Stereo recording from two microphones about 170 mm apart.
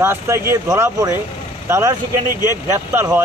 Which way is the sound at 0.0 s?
15° right (ahead or behind).